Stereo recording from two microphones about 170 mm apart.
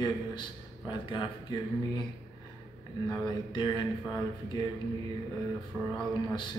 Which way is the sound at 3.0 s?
25° left (ahead or behind).